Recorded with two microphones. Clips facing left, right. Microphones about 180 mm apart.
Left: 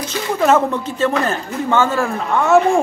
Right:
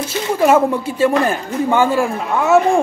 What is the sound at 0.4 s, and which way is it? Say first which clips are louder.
Speech: right 2 dB; 10° right (ahead or behind).